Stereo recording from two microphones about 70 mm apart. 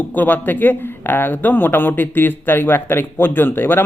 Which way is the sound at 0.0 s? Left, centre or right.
Left.